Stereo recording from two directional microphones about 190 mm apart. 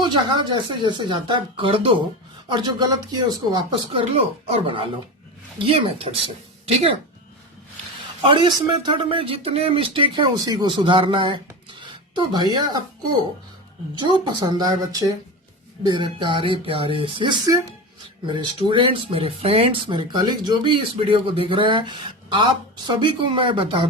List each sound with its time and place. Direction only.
0.0 s speech: 25° right (ahead or behind)
8.3 s speech: 25° right (ahead or behind)
11.8 s a sound: 25° right (ahead or behind)
14.0 s speech: 25° right (ahead or behind)